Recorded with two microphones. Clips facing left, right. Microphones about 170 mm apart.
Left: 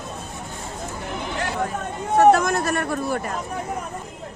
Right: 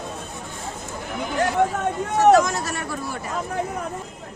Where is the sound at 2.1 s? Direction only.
55° left (ahead or behind).